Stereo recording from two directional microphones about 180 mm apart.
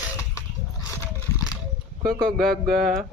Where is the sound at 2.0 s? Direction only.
55° right (ahead or behind).